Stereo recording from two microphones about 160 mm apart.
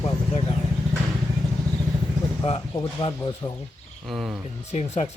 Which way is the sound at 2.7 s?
30° left (ahead or behind).